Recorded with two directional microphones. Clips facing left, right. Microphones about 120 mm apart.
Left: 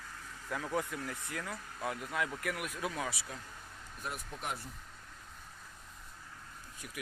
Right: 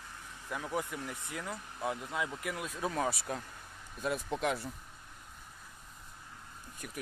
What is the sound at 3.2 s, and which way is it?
Speech, 55° right (ahead or behind).